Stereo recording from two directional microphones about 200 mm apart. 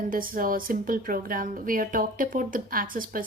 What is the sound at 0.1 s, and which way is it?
Speech, 45° right (ahead or behind).